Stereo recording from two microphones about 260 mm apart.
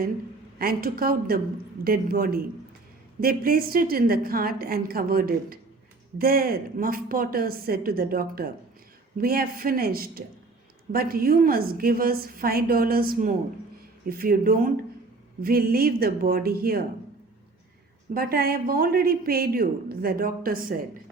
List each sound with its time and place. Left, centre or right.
0.6 s a man's voice: right
18.1 s a man's voice: right